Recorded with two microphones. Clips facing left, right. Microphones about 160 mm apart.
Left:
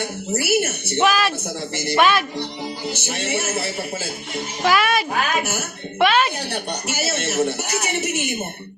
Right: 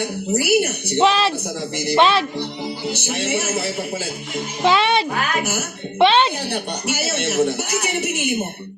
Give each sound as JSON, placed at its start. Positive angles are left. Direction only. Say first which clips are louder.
{"t": 0.0, "sound": "a man's voice", "louder": "right 3 dB", "side_deg": -15}
{"t": 1.7, "sound": "a man's voice", "louder": "right 3 dB", "side_deg": -15}
{"t": 2.0, "sound": "a child's voice", "louder": "right 1 dB", "side_deg": -30}
{"t": 2.8, "sound": "a man's voice", "louder": "right 3 dB", "side_deg": -15}
{"t": 4.6, "sound": "a child's voice", "louder": "right 2 dB", "side_deg": -25}
{"t": 6.5, "sound": "a man's voice", "louder": "right 2 dB", "side_deg": -10}